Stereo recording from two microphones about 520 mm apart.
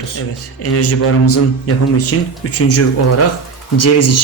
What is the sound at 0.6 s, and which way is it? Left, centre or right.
A man's voice, left.